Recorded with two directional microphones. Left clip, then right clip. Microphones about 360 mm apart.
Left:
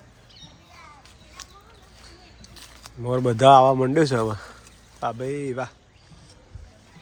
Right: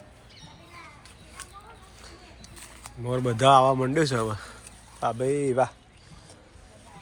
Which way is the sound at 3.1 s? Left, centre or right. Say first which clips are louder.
Left 5 dB; centre.